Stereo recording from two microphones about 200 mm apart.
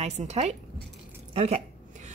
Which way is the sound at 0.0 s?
35° right (ahead or behind).